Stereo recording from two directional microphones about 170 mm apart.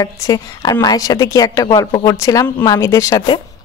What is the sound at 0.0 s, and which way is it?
Speech, 20° left (ahead or behind).